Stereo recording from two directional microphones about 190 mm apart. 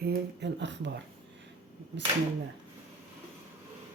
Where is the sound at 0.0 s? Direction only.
60° right (ahead or behind).